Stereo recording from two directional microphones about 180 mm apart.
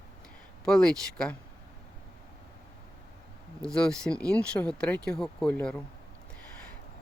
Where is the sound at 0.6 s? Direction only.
5° left (ahead or behind).